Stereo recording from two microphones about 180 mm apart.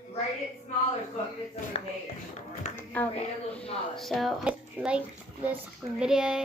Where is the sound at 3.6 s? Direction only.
30° left (ahead or behind).